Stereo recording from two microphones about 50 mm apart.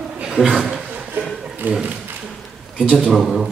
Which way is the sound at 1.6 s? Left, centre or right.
Right.